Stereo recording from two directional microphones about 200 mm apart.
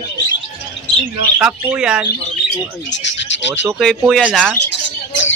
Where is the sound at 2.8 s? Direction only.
60° left (ahead or behind).